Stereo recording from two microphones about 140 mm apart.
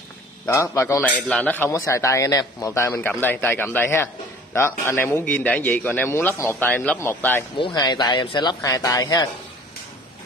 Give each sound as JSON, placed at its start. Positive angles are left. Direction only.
{"t": 0.5, "sound": "a man's voice", "side_deg": 20}
{"t": 7.5, "sound": "a man's voice", "side_deg": 35}